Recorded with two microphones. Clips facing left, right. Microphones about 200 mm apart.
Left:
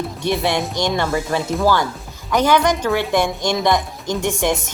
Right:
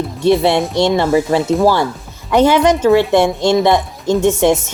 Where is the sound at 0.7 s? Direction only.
25° right (ahead or behind).